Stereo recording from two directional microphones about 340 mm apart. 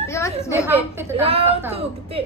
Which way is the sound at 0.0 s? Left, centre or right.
Centre.